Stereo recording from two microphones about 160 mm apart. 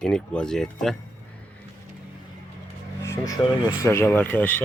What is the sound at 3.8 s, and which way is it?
Speech, 15° left (ahead or behind).